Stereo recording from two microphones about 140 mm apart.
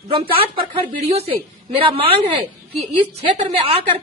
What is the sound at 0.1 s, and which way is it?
A woman's voice, 40° right (ahead or behind).